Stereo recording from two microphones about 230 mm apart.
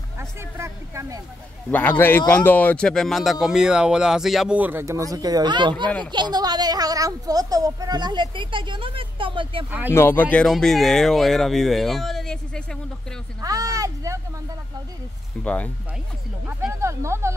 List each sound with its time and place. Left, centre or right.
0.2 s a sound: centre
1.7 s speech: centre; by 9.7 s right
9.7 s speech: centre
9.9 s speech: centre
13.4 s speech: centre
15.4 s speech: centre
16.4 s speech: centre